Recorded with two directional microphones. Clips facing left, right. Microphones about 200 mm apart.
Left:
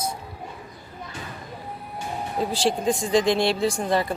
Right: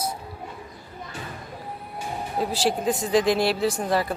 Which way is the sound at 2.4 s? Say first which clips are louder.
Left 1 dB; 5° right (ahead or behind).